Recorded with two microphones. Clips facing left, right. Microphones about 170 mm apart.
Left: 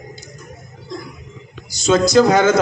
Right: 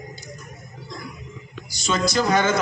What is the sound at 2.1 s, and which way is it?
Speech, 90° left.